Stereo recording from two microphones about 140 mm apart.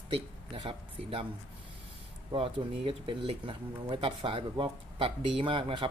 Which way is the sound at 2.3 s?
40° right (ahead or behind).